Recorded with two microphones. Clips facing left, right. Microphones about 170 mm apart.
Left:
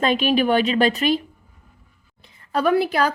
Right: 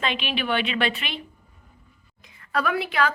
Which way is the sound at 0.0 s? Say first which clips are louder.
Left 9 dB; 40° left (ahead or behind).